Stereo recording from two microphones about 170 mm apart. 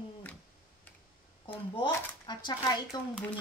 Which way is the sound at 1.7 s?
25° left (ahead or behind).